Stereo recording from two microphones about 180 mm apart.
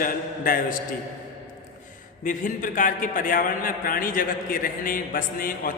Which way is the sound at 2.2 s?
45° left (ahead or behind).